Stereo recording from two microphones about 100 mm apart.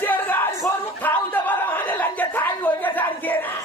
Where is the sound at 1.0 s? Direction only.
15° left (ahead or behind).